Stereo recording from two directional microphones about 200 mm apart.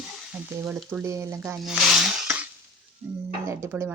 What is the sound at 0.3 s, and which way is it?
A woman's voice, 10° right (ahead or behind).